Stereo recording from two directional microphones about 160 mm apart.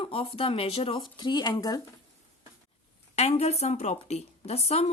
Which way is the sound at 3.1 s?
45° left (ahead or behind).